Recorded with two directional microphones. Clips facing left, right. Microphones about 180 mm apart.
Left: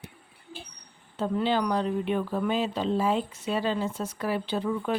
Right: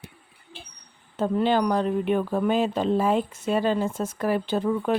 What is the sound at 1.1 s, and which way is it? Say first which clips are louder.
Speech: right 4 dB; 50° right (ahead or behind).